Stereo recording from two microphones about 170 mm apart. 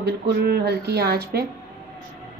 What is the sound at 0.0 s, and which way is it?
Speech, 75° right (ahead or behind).